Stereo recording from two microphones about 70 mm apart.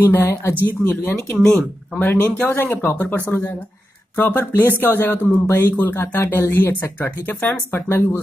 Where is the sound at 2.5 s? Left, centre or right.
Left.